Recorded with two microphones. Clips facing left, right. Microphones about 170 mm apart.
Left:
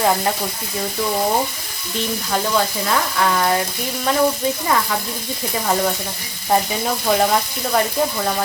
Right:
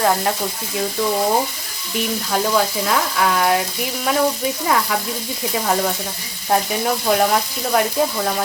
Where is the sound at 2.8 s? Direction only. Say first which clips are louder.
Even; centre (ahead or behind).